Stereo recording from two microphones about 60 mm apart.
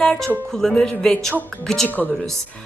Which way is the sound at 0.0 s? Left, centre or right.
Centre.